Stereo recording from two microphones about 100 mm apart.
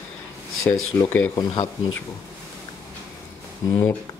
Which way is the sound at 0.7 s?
25° left (ahead or behind).